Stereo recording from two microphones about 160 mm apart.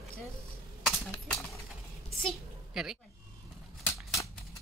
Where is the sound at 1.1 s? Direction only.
Centre (ahead or behind).